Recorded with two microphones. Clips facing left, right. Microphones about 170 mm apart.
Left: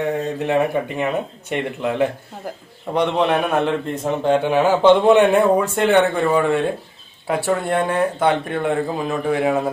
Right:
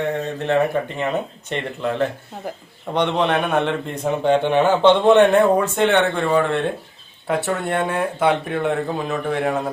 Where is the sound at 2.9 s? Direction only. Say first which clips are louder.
Left 1 dB; 5° left (ahead or behind).